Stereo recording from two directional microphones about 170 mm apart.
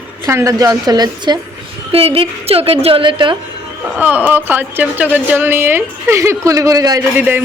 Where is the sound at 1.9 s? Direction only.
35° right (ahead or behind).